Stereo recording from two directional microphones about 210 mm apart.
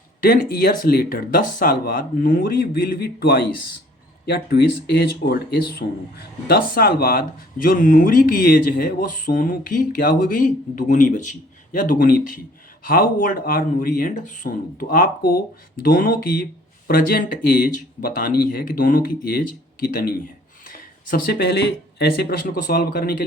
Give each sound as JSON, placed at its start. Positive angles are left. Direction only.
{"t": 0.2, "sound": "speech", "side_deg": 45}